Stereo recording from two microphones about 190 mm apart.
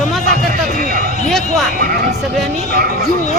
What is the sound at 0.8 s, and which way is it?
Speech, 45° right (ahead or behind).